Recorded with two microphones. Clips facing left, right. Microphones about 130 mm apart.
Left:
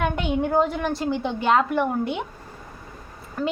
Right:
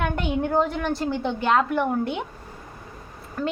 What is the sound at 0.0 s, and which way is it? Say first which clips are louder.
A woman's voice: left 1 dB; centre (ahead or behind).